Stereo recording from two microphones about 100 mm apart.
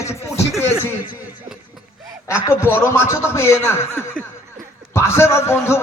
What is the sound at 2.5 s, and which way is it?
A man's voice, 25° left (ahead or behind).